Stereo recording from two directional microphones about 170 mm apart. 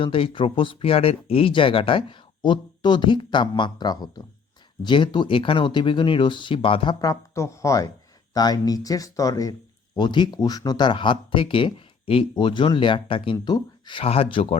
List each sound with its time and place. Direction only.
0.0 s speech: 30° left (ahead or behind)